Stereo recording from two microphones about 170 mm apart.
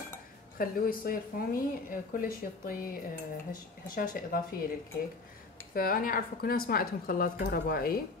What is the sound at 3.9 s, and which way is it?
Speech, 55° left (ahead or behind).